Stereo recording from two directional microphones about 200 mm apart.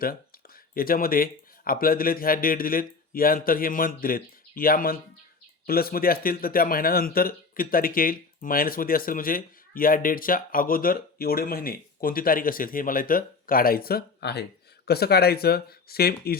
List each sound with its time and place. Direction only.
0.7 s a man's voice: 45° left (ahead or behind)